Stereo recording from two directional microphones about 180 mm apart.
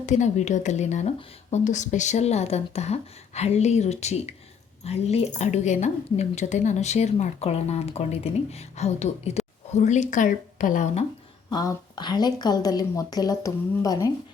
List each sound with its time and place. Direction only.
0.0 s a woman's voice: 40° left (ahead or behind)
11.4 s a woman's voice: 20° left (ahead or behind)